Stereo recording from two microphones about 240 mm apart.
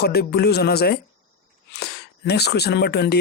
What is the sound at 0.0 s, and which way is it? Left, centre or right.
Speech, left.